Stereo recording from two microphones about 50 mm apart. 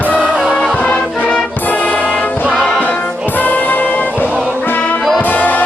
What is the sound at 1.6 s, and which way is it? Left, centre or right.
Music, left.